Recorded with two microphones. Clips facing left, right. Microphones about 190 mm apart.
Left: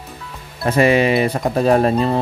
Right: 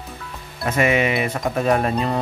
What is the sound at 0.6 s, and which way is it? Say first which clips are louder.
Speech: left 5 dB; 35° left (ahead or behind).